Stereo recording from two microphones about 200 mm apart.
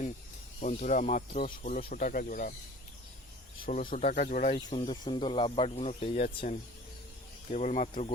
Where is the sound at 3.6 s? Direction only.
45° left (ahead or behind).